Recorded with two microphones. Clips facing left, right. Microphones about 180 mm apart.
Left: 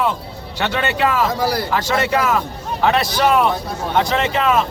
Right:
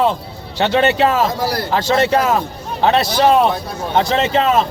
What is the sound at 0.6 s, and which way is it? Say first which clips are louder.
A man's voice: right 5 dB; 25° right (ahead or behind).